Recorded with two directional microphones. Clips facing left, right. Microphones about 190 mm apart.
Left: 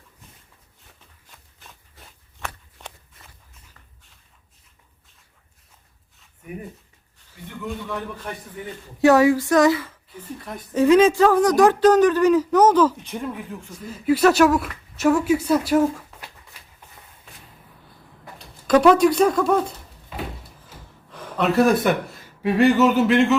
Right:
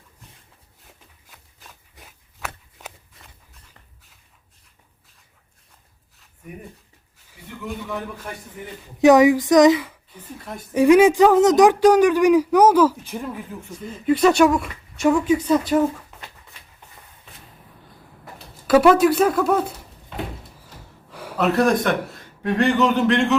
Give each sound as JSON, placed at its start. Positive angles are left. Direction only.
{"t": 1.3, "sound": "a sound", "side_deg": 0}
{"t": 2.7, "sound": "walk", "side_deg": 0}
{"t": 6.4, "sound": "a man's voice", "side_deg": 0}
{"t": 9.0, "sound": "speech", "side_deg": -20}
{"t": 18.7, "sound": "speech", "side_deg": -5}